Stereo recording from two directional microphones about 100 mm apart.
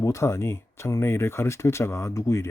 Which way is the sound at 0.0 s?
30° left (ahead or behind).